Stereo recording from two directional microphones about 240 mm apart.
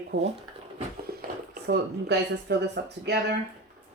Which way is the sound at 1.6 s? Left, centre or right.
Right.